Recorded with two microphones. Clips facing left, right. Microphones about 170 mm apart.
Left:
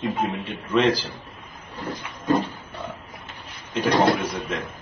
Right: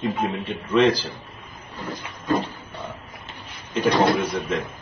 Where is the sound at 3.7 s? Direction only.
Centre (ahead or behind).